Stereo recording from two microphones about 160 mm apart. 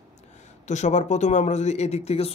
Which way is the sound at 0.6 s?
45° left (ahead or behind).